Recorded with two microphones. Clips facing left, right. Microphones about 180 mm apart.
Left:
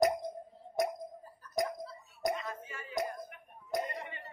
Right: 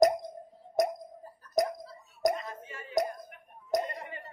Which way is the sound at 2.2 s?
35° right (ahead or behind).